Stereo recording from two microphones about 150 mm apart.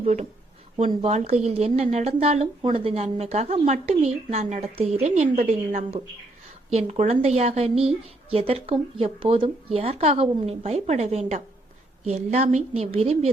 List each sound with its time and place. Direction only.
0.0 s a woman's voice: 50° right (ahead or behind)